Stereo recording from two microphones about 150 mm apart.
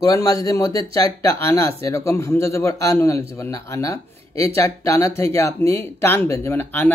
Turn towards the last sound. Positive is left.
turn(degrees=15)  # may be behind; listen again after turning